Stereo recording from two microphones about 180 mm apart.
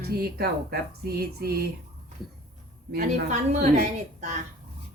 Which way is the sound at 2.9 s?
50° right (ahead or behind).